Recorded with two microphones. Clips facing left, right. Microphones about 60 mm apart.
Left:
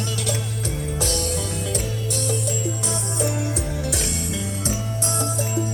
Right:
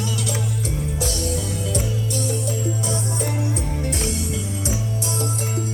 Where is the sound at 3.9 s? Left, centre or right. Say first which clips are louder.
Right 2 dB; left.